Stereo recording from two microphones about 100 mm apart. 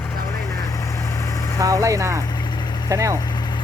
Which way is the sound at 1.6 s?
35° right (ahead or behind).